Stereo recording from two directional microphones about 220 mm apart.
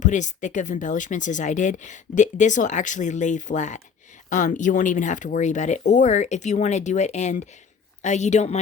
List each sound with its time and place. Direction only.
0.0 s speech: 35° left (ahead or behind)